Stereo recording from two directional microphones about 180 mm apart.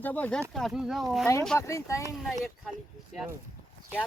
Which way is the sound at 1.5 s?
15° left (ahead or behind).